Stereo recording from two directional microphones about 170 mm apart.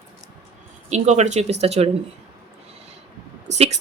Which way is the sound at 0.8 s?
40° right (ahead or behind).